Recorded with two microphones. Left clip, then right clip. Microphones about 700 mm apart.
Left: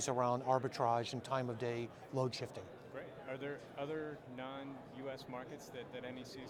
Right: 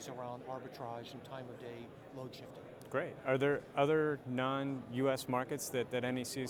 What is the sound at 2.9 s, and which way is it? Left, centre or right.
Speech, right.